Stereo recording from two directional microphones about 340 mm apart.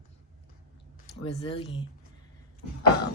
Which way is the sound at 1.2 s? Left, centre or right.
Centre.